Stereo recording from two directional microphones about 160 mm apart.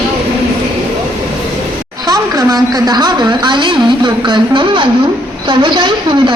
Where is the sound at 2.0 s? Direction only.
20° right (ahead or behind).